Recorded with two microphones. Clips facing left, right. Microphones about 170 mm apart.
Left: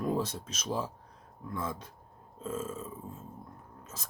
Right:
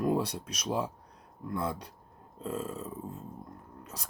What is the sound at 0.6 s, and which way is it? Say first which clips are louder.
Speech: right 2 dB; 15° right (ahead or behind).